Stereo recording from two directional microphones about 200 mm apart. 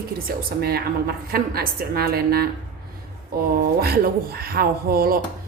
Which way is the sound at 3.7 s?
50° right (ahead or behind).